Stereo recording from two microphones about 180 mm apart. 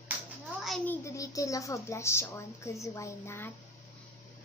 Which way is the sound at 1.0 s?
20° left (ahead or behind).